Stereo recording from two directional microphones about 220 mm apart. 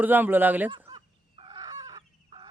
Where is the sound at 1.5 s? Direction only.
20° right (ahead or behind).